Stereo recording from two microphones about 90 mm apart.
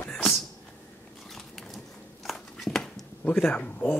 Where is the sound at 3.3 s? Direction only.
15° left (ahead or behind).